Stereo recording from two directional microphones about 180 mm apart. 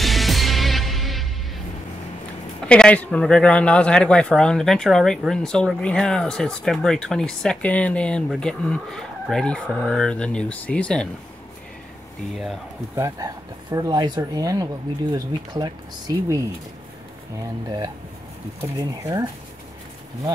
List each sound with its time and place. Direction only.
0.0 s music: centre (ahead or behind)
2.6 s speech: 5° left (ahead or behind)
12.9 s speech: 15° right (ahead or behind)
17.6 s speech: 20° right (ahead or behind)